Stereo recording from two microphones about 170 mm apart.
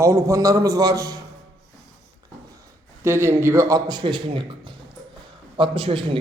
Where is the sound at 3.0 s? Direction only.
15° right (ahead or behind).